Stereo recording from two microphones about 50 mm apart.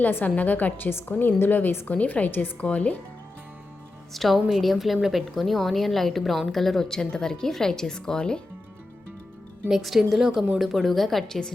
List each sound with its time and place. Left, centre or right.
0.0 s a woman's voice: left
0.9 s a woman's voice: left
4.1 s a woman's voice: centre
9.6 s a woman's voice: centre